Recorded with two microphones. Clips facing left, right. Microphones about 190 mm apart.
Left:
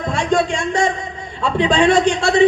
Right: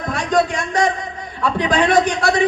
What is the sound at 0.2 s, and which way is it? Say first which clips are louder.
A man's voice: even; 25° left (ahead or behind).